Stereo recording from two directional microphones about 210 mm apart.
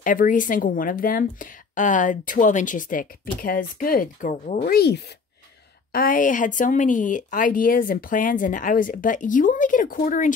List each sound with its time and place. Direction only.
0.0 s speech: 40° left (ahead or behind)